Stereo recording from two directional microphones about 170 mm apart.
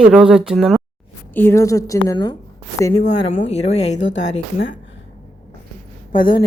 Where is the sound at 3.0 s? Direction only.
45° left (ahead or behind).